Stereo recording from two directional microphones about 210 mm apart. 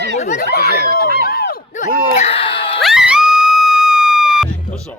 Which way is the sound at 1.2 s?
45° left (ahead or behind).